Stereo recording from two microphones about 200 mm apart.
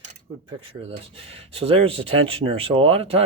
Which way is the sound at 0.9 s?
30° right (ahead or behind).